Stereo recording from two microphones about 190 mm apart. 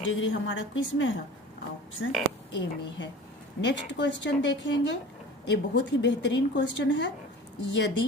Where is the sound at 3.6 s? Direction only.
65° left (ahead or behind).